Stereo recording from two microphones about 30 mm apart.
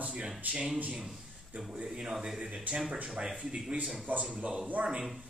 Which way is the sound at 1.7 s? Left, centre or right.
Right.